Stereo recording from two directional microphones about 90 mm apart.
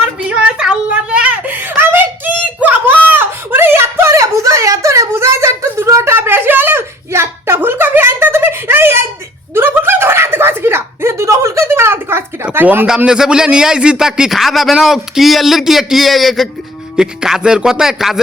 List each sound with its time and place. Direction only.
0.3 s whimper: 10° right (ahead or behind)
9.6 s a sound: 25° right (ahead or behind)
12.5 s speech: 20° right (ahead or behind)
13.1 s a man's voice: 10° right (ahead or behind)